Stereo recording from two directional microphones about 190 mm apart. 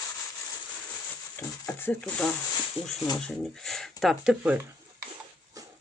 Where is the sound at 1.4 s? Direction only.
10° left (ahead or behind); by 4.5 s 5° right (ahead or behind).